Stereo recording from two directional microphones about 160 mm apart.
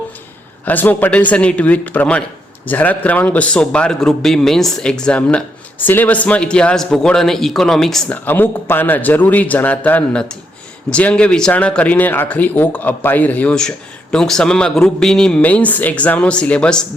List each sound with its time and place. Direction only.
0.6 s speech: 10° left (ahead or behind)